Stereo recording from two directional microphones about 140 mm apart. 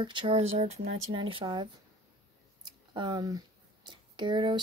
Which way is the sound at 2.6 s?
30° right (ahead or behind).